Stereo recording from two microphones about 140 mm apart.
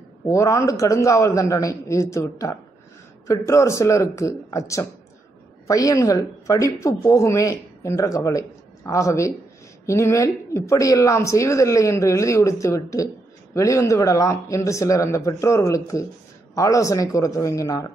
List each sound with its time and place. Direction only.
0.3 s speech: 20° left (ahead or behind)